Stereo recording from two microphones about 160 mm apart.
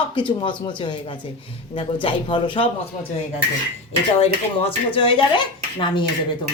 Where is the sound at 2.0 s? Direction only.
35° left (ahead or behind).